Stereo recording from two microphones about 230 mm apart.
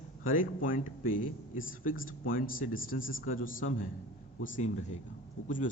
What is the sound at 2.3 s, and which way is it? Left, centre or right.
A man's voice, left.